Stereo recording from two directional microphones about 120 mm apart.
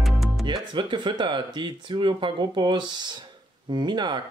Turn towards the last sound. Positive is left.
turn(degrees=-40)  # may be behind; listen again after turning